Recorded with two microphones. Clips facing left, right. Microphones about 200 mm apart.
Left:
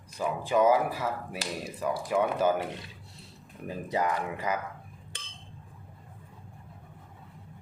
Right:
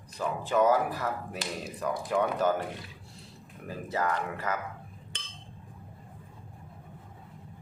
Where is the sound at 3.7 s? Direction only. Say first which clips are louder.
Left 2 dB; 15° left (ahead or behind).